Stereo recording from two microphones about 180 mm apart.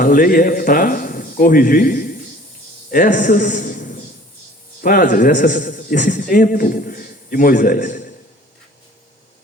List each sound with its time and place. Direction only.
0.0 s a man's voice: 50° left (ahead or behind)